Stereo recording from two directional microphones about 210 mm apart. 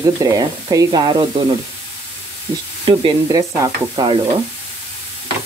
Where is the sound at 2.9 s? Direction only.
20° right (ahead or behind).